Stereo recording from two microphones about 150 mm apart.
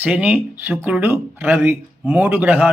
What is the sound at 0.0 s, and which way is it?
Speech, 10° right (ahead or behind).